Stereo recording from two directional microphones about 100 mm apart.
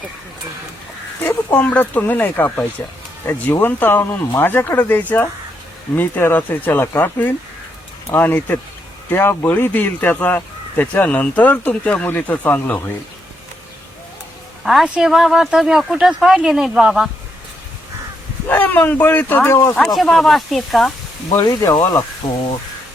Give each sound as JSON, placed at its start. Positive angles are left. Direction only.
{"t": 1.2, "sound": "speech", "side_deg": 20}
{"t": 14.6, "sound": "speech", "side_deg": 0}
{"t": 18.4, "sound": "speech", "side_deg": 20}
{"t": 19.7, "sound": "speech", "side_deg": 0}
{"t": 21.3, "sound": "speech", "side_deg": 35}